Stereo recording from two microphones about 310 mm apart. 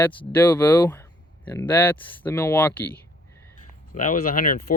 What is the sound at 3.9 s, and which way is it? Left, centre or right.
Speech, left.